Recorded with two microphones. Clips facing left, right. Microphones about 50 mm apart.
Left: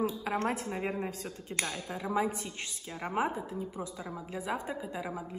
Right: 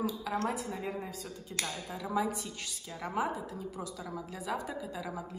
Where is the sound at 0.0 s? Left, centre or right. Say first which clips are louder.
Left 2 dB; left.